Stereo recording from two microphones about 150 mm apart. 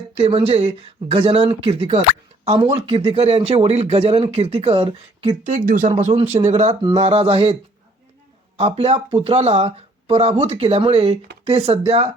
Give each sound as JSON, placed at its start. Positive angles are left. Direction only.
{"t": 0.2, "sound": "speech", "side_deg": -40}
{"t": 5.6, "sound": "speech", "side_deg": -65}
{"t": 6.0, "sound": "speech", "side_deg": -45}
{"t": 8.5, "sound": "speech", "side_deg": -40}